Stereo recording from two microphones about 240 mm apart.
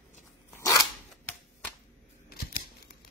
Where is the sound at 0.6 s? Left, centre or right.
Centre.